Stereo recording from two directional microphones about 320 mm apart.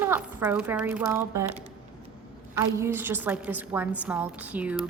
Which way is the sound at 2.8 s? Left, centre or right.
Centre.